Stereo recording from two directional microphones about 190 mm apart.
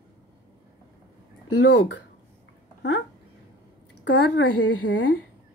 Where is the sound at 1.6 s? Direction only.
65° left (ahead or behind).